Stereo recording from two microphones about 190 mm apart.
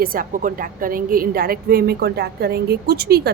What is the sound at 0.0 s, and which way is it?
A woman's voice, 50° right (ahead or behind).